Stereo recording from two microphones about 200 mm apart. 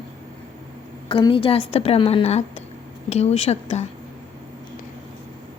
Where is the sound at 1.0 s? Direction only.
25° left (ahead or behind).